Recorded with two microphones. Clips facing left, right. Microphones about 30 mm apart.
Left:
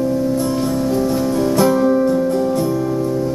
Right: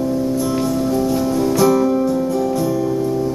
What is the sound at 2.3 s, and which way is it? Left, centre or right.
Music, left.